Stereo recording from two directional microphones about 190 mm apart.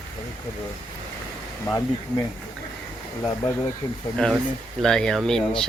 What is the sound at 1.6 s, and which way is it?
Speech, 15° left (ahead or behind).